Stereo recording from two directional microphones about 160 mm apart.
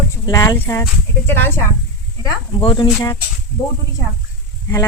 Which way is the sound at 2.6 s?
30° left (ahead or behind).